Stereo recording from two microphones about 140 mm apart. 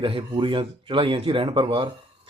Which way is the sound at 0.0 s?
40° right (ahead or behind).